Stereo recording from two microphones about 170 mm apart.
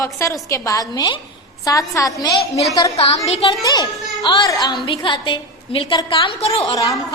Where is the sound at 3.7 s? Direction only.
25° left (ahead or behind).